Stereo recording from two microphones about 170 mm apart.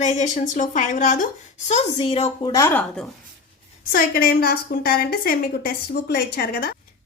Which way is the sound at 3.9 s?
60° left (ahead or behind).